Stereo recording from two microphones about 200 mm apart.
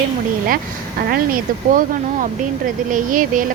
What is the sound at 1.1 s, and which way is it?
Speech, 45° right (ahead or behind).